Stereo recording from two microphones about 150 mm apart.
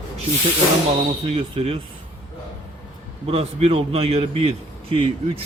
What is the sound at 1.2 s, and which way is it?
Speech, 45° right (ahead or behind).